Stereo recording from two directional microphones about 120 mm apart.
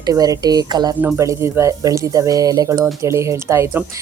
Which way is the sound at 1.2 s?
25° right (ahead or behind).